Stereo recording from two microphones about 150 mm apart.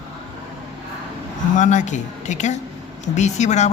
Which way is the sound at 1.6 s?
55° left (ahead or behind).